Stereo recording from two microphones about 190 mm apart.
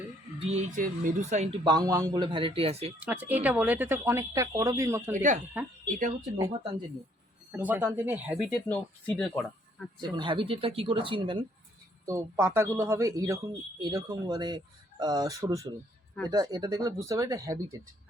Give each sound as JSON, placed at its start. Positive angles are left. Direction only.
{"t": 0.5, "sound": "speech", "side_deg": -40}
{"t": 1.6, "sound": "speech", "side_deg": -20}
{"t": 3.0, "sound": "speech", "side_deg": -10}
{"t": 5.1, "sound": "speech", "side_deg": -40}
{"t": 7.5, "sound": "speech", "side_deg": -10}
{"t": 8.7, "sound": "speech", "side_deg": 5}
{"t": 10.0, "sound": "speech", "side_deg": -25}
{"t": 12.0, "sound": "speech", "side_deg": -15}